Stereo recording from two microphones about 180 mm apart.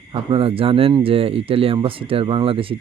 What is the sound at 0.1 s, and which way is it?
Speech, 30° right (ahead or behind).